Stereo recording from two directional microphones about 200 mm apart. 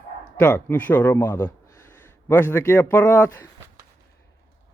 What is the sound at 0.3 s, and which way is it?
A man's voice, 5° left (ahead or behind).